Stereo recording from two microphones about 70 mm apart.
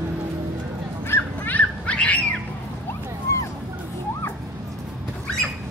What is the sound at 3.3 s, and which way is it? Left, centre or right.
Music, left.